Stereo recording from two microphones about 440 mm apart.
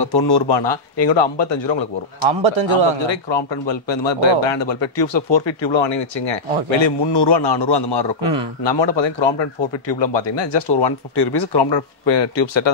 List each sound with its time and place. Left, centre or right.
0.0 s speech: left
2.2 s a man's voice: right
3.1 s speech: left
8.2 s speech: right
8.6 s speech: left